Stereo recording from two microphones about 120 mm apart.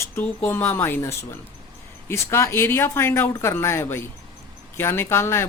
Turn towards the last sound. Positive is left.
turn(degrees=20)  # may be behind; listen again after turning